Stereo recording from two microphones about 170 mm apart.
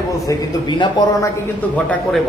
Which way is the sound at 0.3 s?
25° left (ahead or behind).